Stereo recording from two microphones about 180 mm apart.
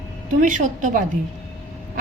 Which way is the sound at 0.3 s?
45° right (ahead or behind).